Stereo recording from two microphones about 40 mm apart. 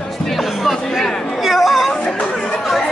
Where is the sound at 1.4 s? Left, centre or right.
Centre.